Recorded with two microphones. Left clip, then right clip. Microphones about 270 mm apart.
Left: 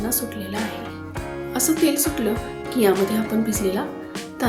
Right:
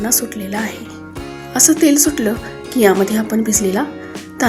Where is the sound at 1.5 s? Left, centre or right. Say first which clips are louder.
Right 10 dB; left.